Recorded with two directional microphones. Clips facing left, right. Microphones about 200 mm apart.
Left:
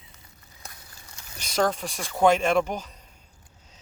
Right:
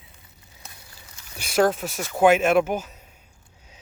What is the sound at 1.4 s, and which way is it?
Speech, 10° right (ahead or behind).